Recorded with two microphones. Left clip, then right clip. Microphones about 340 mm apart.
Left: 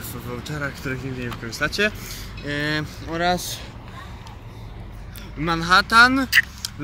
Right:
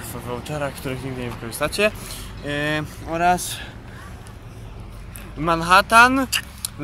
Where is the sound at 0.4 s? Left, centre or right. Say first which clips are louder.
Right 1 dB; centre.